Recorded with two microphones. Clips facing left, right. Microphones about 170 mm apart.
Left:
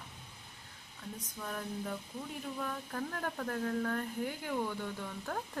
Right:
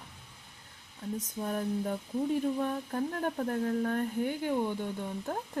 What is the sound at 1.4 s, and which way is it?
Speech, 30° right (ahead or behind).